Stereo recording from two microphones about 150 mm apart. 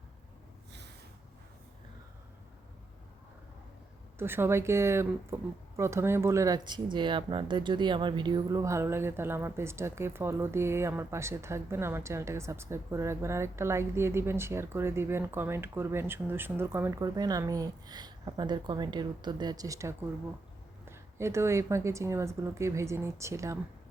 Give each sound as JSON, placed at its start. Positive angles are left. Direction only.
{"t": 4.2, "sound": "speech", "side_deg": -15}